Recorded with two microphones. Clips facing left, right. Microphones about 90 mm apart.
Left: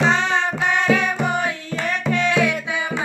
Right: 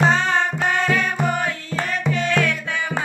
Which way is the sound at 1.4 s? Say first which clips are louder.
Left 1 dB; 45° right (ahead or behind).